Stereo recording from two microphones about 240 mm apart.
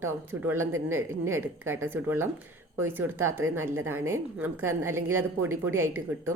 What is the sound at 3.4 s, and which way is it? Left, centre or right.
Speech, right.